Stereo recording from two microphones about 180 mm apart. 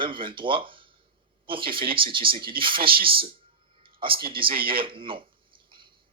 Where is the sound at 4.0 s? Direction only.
30° right (ahead or behind).